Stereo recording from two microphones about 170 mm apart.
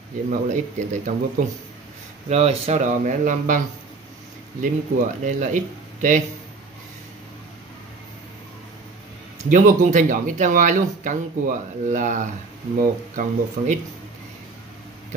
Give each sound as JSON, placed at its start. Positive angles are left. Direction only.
{"t": 0.3, "sound": "speech", "side_deg": -45}
{"t": 2.2, "sound": "speech", "side_deg": -40}
{"t": 9.5, "sound": "speech", "side_deg": -45}